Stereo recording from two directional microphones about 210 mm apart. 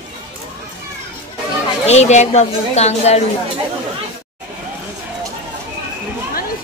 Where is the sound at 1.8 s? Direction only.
35° left (ahead or behind).